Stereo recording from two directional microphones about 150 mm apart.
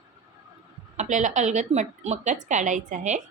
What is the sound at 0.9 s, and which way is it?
Speech, 50° right (ahead or behind).